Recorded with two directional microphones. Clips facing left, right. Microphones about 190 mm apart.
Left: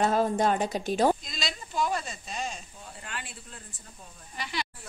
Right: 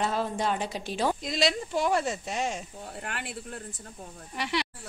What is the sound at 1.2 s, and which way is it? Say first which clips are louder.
Speech: right 10 dB; 75° right (ahead or behind).